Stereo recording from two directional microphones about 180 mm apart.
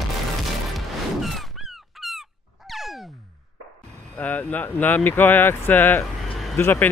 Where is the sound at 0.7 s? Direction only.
Centre (ahead or behind).